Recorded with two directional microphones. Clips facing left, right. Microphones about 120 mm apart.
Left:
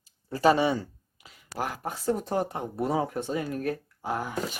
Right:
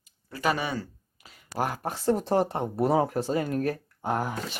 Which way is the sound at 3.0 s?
35° right (ahead or behind).